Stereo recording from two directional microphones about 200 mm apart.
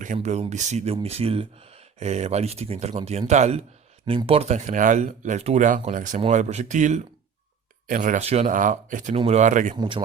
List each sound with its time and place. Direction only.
0.0 s speech: 35° right (ahead or behind)
9.7 s speech: 25° right (ahead or behind)